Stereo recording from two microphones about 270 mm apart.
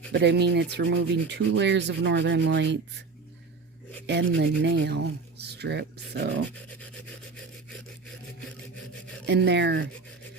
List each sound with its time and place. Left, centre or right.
0.1 s rub: right
4.0 s rub: right
9.2 s rub: right